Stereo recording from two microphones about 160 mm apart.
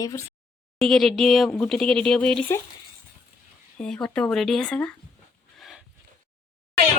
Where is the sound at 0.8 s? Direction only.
Centre (ahead or behind).